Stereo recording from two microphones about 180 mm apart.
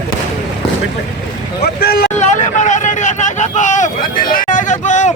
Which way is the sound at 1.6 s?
60° left (ahead or behind).